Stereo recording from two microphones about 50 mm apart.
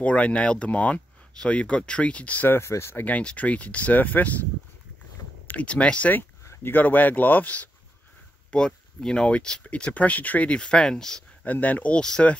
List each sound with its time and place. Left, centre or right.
0.0 s speech: left
2.6 s speech: left
3.1 s speech: left
5.5 s speech: left
6.6 s speech: left
8.5 s speech: centre
11.4 s speech: left
11.9 s speech: centre